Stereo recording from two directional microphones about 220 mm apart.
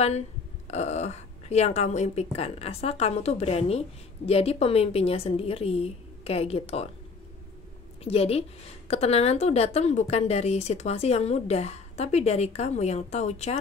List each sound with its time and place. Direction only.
0.7 s a woman's voice: 30° left (ahead or behind)
8.0 s a woman's voice: 25° left (ahead or behind)